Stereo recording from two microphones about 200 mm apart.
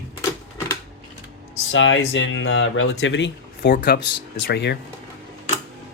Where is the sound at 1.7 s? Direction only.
70° left (ahead or behind).